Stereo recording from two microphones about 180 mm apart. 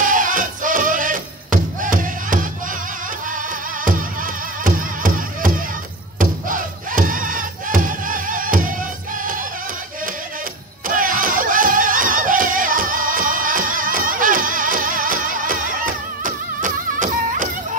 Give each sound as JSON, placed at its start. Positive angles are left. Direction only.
{"t": 0.0, "sound": "music", "side_deg": -45}
{"t": 3.8, "sound": "music", "side_deg": -50}
{"t": 6.1, "sound": "crowd", "side_deg": -50}
{"t": 10.9, "sound": "music", "side_deg": -50}